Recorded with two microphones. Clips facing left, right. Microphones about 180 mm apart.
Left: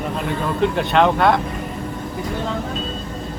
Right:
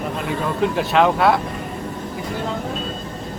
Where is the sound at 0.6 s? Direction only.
Centre (ahead or behind).